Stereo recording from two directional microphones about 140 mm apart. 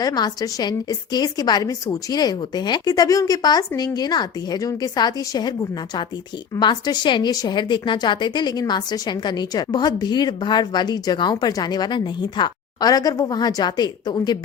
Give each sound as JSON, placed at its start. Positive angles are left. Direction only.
{"t": 0.0, "sound": "a woman's voice", "side_deg": 30}